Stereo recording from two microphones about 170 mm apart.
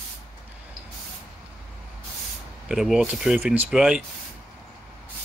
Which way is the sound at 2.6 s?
5° right (ahead or behind).